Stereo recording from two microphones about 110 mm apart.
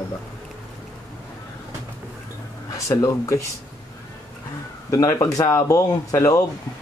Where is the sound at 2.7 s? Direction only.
30° left (ahead or behind).